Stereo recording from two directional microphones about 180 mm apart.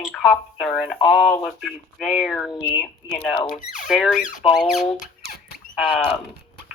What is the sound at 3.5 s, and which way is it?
Speech, 45° left (ahead or behind).